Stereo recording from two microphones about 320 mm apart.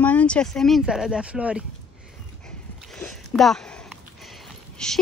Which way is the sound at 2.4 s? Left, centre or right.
Centre.